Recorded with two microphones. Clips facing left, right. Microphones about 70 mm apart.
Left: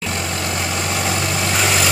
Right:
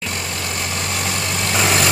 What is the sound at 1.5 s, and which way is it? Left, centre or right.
Vehicle, centre.